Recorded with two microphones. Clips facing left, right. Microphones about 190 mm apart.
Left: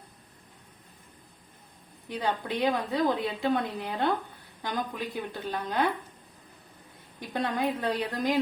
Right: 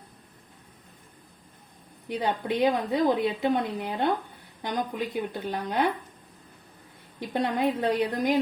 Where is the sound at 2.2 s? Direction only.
20° right (ahead or behind).